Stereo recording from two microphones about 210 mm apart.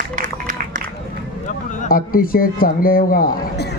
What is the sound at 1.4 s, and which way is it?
Speech, 40° left (ahead or behind).